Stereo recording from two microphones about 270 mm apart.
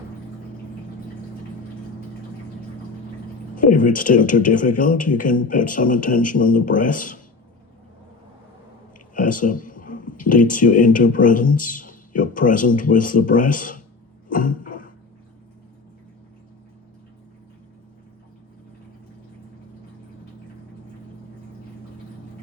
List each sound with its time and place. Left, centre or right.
3.5 s speech: left
9.1 s speech: left
14.3 s a sound: left